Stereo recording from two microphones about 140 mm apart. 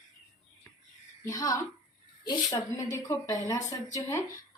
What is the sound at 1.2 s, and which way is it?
A woman's voice, 25° left (ahead or behind).